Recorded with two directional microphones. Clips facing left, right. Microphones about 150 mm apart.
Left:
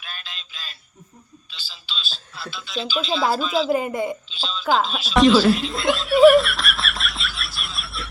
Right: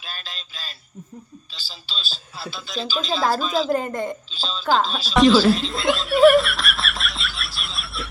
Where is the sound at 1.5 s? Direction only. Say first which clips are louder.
Left 1 dB; 40° right (ahead or behind).